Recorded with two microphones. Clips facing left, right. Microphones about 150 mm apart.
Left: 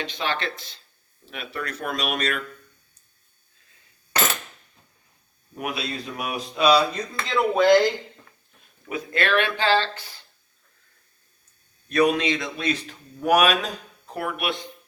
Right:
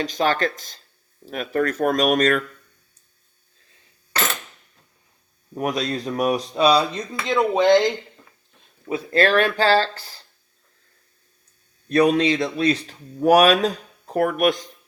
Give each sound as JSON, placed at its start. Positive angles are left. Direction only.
{"t": 0.0, "sound": "speech", "side_deg": -40}
{"t": 5.5, "sound": "speech", "side_deg": -40}
{"t": 7.3, "sound": "speech", "side_deg": -20}
{"t": 8.9, "sound": "speech", "side_deg": -35}
{"t": 11.9, "sound": "speech", "side_deg": -35}